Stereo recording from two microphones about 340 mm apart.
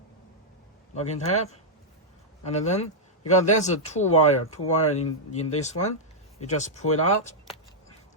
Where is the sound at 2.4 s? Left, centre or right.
Centre.